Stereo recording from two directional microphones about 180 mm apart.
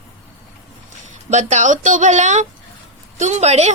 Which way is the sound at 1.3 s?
40° right (ahead or behind).